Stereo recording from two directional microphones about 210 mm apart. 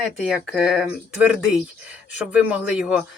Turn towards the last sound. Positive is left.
turn(degrees=-5)  # may be behind; listen again after turning